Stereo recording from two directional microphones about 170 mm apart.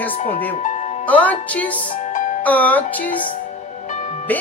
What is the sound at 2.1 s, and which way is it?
Music, 50° left (ahead or behind).